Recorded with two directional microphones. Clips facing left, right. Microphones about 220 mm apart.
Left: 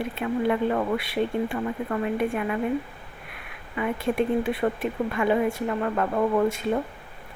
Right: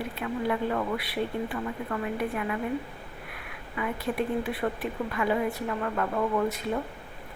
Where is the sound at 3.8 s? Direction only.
25° left (ahead or behind).